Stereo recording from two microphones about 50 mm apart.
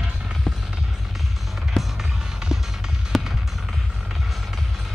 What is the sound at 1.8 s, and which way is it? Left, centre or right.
Music, centre.